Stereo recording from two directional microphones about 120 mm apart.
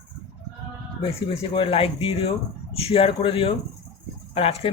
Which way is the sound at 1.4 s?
50° left (ahead or behind).